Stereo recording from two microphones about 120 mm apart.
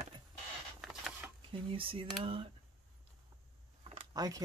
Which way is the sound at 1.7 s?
50° right (ahead or behind).